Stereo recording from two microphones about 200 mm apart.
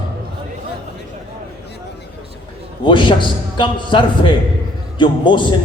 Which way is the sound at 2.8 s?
25° left (ahead or behind).